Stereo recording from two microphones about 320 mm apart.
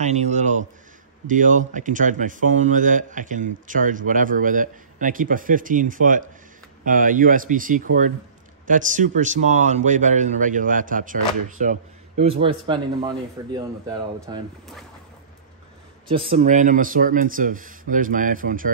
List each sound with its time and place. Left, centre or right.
0.0 s a man's voice: right
16.1 s a man's voice: centre